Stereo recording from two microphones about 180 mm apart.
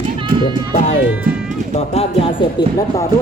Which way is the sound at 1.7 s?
35° left (ahead or behind).